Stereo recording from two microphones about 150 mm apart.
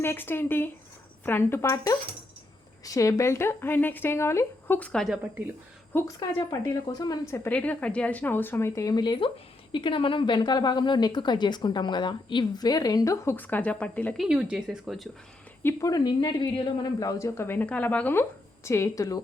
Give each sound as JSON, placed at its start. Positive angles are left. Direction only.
{"t": 0.0, "sound": "a woman's voice", "side_deg": 15}
{"t": 6.1, "sound": "a woman's voice", "side_deg": 30}
{"t": 14.2, "sound": "a woman's voice", "side_deg": -5}
{"t": 15.6, "sound": "a woman's voice", "side_deg": 25}